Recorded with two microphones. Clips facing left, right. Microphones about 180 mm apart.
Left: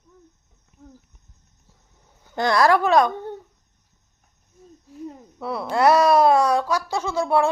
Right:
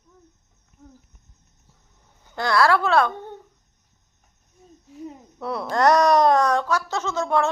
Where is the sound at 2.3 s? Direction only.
20° left (ahead or behind).